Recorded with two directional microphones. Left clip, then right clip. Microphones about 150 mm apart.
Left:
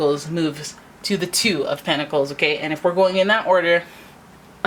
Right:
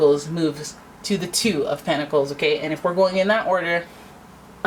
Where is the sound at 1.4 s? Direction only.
30° left (ahead or behind).